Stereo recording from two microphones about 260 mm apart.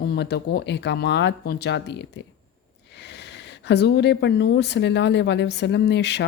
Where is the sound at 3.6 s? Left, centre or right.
Left.